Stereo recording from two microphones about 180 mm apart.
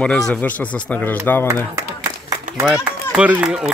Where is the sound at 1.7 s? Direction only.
15° right (ahead or behind).